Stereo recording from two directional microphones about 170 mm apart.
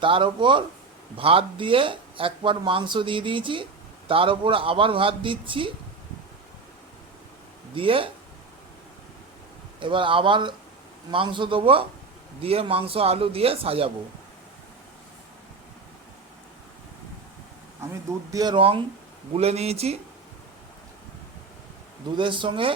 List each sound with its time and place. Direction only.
0.0 s a woman's voice: 30° right (ahead or behind)
7.8 s a woman's voice: 30° right (ahead or behind)
9.8 s a woman's voice: 30° right (ahead or behind)
18.3 s a woman's voice: 25° right (ahead or behind)
22.1 s speech: 30° right (ahead or behind)